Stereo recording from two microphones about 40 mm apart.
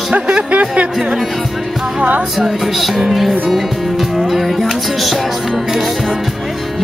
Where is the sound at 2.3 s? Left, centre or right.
Centre.